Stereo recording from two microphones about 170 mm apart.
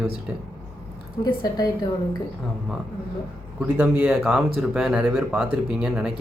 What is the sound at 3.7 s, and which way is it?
Speech, 5° right (ahead or behind).